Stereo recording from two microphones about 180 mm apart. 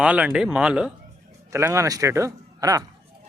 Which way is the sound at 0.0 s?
5° right (ahead or behind).